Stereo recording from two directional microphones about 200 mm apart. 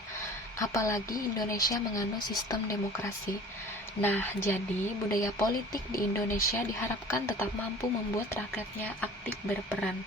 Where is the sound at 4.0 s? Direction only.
10° left (ahead or behind).